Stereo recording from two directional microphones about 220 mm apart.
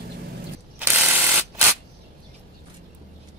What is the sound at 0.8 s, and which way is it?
Mechanisms, 10° right (ahead or behind).